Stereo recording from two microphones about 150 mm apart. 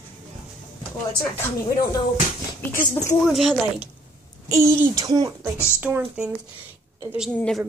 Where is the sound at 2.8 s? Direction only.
50° left (ahead or behind).